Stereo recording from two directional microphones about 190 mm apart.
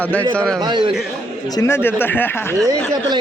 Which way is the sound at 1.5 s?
15° left (ahead or behind).